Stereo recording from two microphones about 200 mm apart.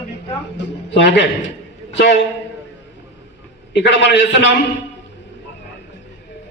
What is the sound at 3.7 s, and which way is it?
Speech, 60° left (ahead or behind).